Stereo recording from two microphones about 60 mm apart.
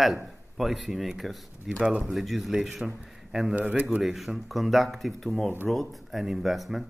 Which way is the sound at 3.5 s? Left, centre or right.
Right.